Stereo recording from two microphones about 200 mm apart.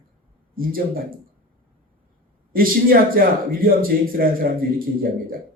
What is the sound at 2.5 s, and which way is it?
Speech, 45° right (ahead or behind).